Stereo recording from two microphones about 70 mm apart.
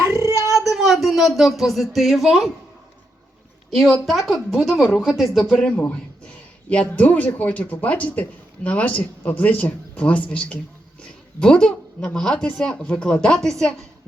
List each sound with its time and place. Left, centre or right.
0.0 s a sound: right
0.5 s speech: centre
3.7 s a woman's voice: centre
5.6 s speech: centre